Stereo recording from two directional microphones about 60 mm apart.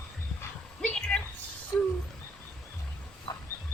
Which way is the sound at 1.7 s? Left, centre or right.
Left.